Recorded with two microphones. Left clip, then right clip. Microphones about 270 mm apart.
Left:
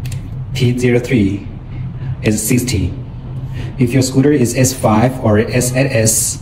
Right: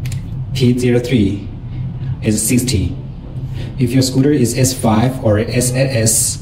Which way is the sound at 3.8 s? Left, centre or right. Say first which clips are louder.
Left 1 dB; centre.